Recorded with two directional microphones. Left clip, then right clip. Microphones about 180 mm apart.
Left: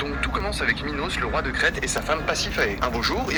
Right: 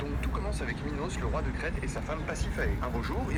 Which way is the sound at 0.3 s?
35° left (ahead or behind).